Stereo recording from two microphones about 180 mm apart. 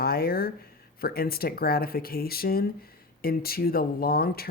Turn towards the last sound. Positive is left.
turn(degrees=55)  # may be behind; listen again after turning